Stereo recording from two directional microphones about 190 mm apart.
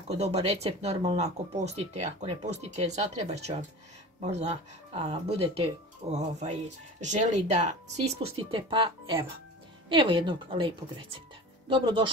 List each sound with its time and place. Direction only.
0.1 s a woman's voice: 35° right (ahead or behind)